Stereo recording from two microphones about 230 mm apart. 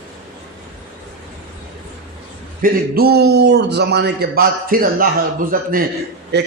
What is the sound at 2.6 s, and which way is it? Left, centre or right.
A man's voice, right.